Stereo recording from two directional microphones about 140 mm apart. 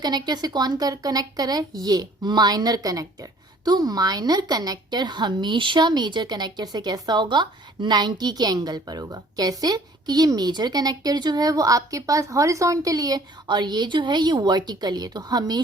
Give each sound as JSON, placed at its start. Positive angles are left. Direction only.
{"t": 0.0, "sound": "a woman's voice", "side_deg": -30}